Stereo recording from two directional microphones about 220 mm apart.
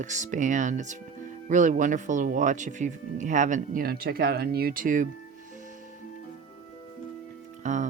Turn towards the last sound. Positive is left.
turn(degrees=-35)  # may be behind; listen again after turning